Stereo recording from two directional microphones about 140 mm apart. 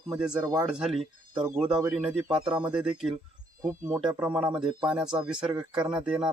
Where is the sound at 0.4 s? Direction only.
25° right (ahead or behind).